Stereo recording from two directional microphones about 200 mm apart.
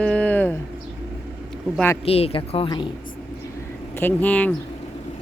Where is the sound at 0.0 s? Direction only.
5° left (ahead or behind).